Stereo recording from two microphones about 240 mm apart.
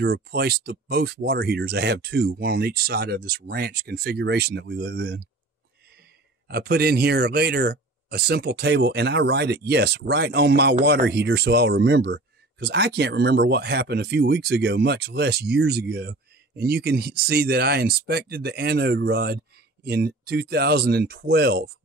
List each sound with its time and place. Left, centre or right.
0.0 s speech: right
6.4 s speech: right